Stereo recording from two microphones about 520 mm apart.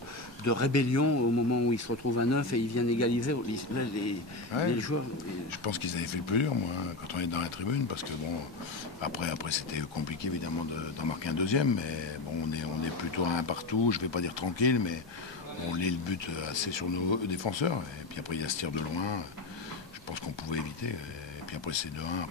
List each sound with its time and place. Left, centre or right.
0.5 s speech: left
5.5 s speech: left
9.0 s speech: left
13.1 s speech: left
21.6 s speech: left